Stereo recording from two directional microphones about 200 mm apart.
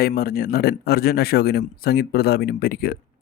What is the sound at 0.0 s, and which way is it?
Speech, 50° left (ahead or behind).